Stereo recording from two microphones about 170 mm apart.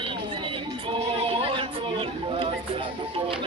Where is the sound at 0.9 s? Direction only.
30° right (ahead or behind).